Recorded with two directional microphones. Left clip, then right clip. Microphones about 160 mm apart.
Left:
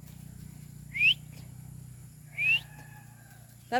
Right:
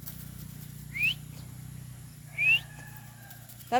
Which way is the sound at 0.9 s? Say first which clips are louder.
Left 4 dB; 20° left (ahead or behind).